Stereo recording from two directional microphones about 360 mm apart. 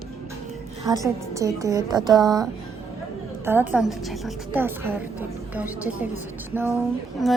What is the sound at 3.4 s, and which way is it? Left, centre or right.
A woman's voice, centre.